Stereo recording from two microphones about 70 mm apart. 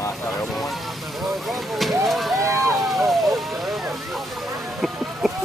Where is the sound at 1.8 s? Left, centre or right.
Centre.